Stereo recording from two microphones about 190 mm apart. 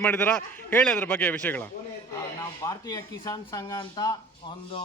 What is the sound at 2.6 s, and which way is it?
Speech, 20° left (ahead or behind).